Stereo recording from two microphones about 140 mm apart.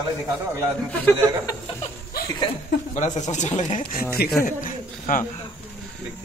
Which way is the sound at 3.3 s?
60° left (ahead or behind).